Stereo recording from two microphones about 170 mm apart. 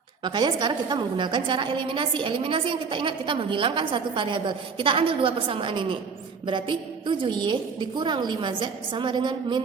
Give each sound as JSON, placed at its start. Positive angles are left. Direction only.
{"t": 0.3, "sound": "a woman's voice", "side_deg": -25}